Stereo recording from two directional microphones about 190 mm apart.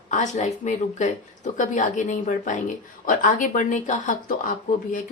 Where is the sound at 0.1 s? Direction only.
40° left (ahead or behind).